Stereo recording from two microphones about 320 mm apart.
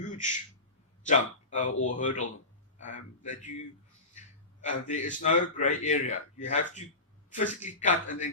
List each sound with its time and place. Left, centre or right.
0.0 s a sound: left
1.0 s a man's voice: left
4.6 s a man's voice: left